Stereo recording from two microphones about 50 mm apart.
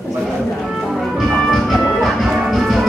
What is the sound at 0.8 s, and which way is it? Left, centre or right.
Music, centre.